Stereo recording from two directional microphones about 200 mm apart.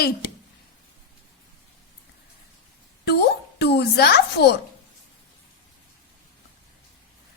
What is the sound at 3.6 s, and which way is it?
Speech, 55° left (ahead or behind).